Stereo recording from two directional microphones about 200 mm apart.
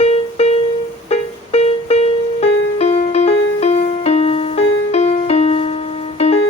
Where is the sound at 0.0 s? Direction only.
30° left (ahead or behind).